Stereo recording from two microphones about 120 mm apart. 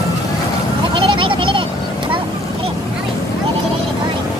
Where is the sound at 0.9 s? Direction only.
45° right (ahead or behind).